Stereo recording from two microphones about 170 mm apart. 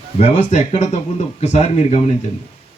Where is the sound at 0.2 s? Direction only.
40° left (ahead or behind).